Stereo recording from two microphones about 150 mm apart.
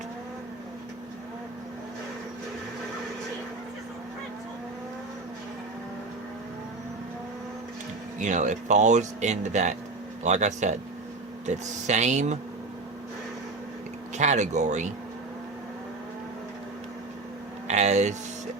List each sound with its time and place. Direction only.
8.2 s speech: 55° right (ahead or behind)
14.2 s speech: 50° right (ahead or behind)
17.7 s speech: 50° right (ahead or behind)